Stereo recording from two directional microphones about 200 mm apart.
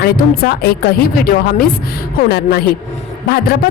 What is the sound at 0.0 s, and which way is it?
Speech, 50° left (ahead or behind).